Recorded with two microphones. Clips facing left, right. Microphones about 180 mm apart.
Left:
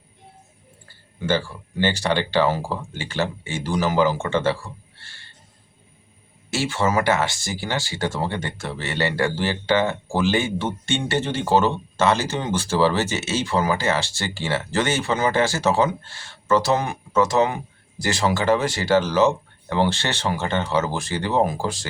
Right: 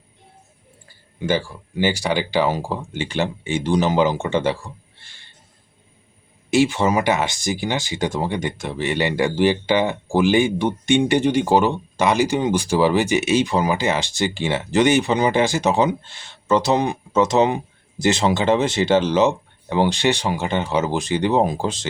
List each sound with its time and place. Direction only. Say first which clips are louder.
0.9 s speech: right 1 dB; 15° right (ahead or behind)
6.5 s speech: right 5 dB; 15° right (ahead or behind)